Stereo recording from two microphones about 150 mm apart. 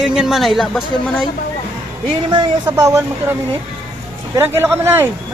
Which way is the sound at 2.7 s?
20° right (ahead or behind).